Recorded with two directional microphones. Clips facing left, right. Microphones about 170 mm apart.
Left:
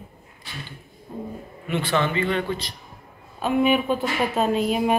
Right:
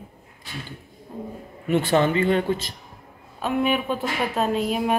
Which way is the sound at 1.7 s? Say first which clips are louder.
Right 4 dB; 45° right (ahead or behind).